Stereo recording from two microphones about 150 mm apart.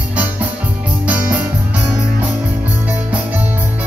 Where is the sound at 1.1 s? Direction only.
10° right (ahead or behind).